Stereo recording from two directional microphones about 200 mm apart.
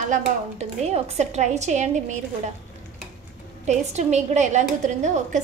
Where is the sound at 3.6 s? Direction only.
35° right (ahead or behind).